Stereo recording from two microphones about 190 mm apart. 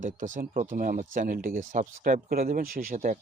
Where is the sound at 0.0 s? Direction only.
40° right (ahead or behind).